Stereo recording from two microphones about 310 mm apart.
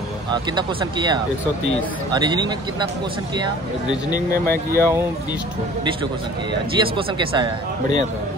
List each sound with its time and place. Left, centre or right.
0.3 s speech: centre
4.3 s speech: centre
6.8 s speech: centre